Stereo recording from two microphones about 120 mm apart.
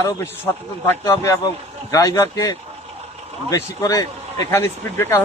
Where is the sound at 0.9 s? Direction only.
20° left (ahead or behind).